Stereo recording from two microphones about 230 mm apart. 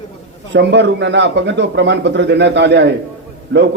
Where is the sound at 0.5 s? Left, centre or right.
Right.